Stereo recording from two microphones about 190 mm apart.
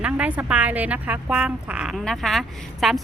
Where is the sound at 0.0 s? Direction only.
5° right (ahead or behind).